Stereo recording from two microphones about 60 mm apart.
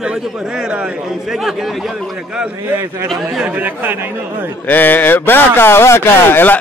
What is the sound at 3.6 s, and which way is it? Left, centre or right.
Speech, right.